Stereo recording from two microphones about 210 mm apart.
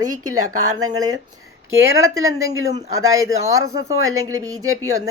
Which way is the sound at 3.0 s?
15° right (ahead or behind).